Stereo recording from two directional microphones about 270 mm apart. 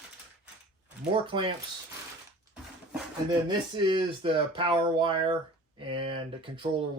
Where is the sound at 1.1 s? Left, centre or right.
Centre.